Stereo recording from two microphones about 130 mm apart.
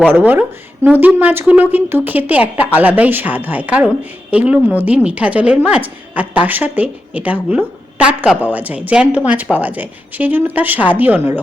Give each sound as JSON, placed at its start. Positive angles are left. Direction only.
{"t": 0.1, "sound": "a woman's voice", "side_deg": -15}